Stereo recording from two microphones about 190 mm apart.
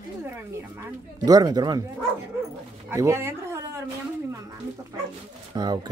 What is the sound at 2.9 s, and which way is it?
Speech, 15° right (ahead or behind).